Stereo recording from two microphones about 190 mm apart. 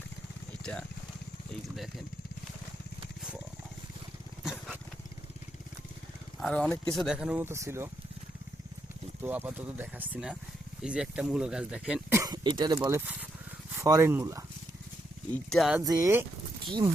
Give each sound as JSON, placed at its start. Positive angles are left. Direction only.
{"t": 0.6, "sound": "speech", "side_deg": 5}
{"t": 4.4, "sound": "dog", "side_deg": -5}
{"t": 6.4, "sound": "speech", "side_deg": 5}
{"t": 9.2, "sound": "speech", "side_deg": -10}
{"t": 12.2, "sound": "speech", "side_deg": -20}
{"t": 15.3, "sound": "speech", "side_deg": 0}
{"t": 15.8, "sound": "speech", "side_deg": -20}